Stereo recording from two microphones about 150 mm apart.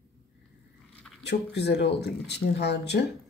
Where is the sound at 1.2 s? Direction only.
90° left.